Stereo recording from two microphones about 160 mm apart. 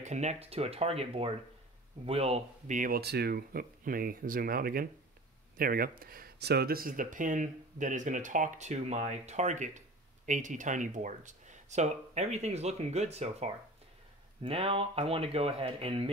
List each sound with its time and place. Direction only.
0.0 s speech: 45° right (ahead or behind)
2.8 s speech: 80° right; by 16.1 s 35° right (ahead or behind)